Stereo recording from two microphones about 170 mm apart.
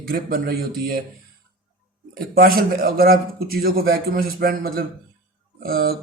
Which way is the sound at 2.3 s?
60° right (ahead or behind).